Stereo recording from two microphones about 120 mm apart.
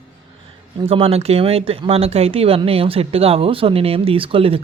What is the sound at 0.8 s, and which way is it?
Speech, 50° right (ahead or behind).